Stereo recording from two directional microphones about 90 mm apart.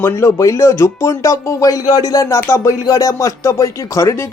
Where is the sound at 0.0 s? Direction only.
35° left (ahead or behind).